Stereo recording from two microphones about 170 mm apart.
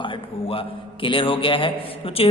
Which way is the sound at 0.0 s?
35° left (ahead or behind).